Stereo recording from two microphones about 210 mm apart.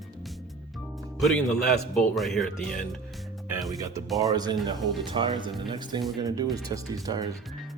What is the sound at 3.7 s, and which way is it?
Speech, 15° right (ahead or behind).